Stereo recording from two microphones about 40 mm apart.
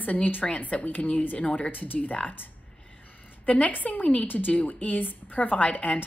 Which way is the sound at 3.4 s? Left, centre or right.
Left.